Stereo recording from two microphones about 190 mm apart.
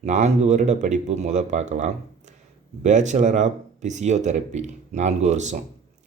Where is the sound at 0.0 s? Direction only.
35° right (ahead or behind).